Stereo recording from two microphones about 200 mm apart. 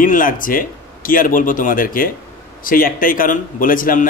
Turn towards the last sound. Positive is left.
turn(degrees=45)  # may be behind; listen again after turning